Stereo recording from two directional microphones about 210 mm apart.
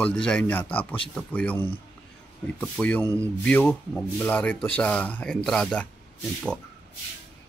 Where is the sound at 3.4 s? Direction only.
10° left (ahead or behind).